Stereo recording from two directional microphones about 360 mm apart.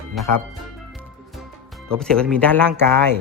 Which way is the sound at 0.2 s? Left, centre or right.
Centre.